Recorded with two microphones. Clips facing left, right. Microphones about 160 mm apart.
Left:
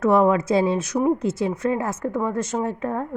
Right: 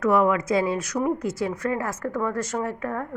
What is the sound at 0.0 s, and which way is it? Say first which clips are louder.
A woman's voice: left 3 dB; 30° left (ahead or behind).